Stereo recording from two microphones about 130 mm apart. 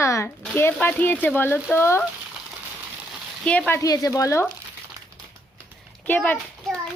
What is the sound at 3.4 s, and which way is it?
Speech, 10° left (ahead or behind).